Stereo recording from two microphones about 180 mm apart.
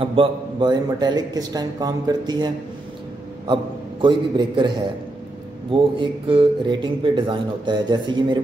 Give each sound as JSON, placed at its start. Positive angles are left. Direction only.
{"t": 0.0, "sound": "speech", "side_deg": -30}
{"t": 4.0, "sound": "speech", "side_deg": -25}